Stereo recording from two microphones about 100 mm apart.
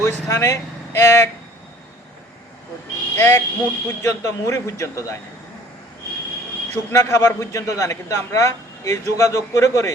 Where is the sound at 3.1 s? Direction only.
25° left (ahead or behind).